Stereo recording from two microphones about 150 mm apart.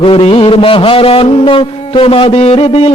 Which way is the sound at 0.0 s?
40° left (ahead or behind).